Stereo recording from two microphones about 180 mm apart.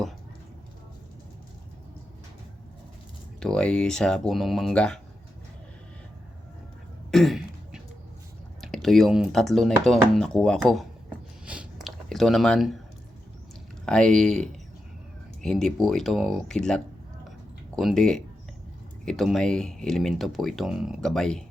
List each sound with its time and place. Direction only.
3.4 s speech: 5° left (ahead or behind)
7.1 s throat clearing: centre (ahead or behind)
8.6 s speech: centre (ahead or behind)
11.4 s a sound: 5° right (ahead or behind)
13.8 s speech: 5° left (ahead or behind)